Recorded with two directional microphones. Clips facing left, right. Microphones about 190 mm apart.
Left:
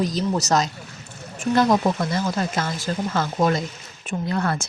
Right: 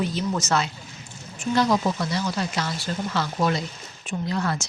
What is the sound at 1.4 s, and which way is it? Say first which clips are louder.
A woman's voice: left 3 dB; 50° left (ahead or behind).